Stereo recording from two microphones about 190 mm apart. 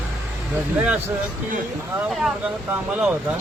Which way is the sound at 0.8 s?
5° right (ahead or behind).